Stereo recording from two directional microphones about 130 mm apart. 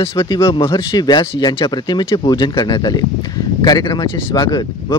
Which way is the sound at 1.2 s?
45° left (ahead or behind).